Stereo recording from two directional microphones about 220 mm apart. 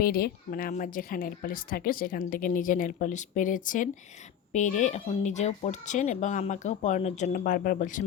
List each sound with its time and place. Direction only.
0.0 s a woman's voice: 45° left (ahead or behind)